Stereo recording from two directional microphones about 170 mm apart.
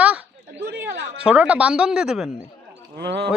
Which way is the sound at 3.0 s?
85° right.